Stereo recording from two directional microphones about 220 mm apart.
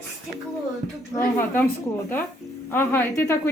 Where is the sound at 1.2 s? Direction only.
10° left (ahead or behind).